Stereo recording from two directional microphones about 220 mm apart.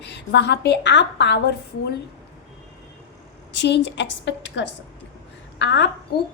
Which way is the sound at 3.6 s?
55° left (ahead or behind).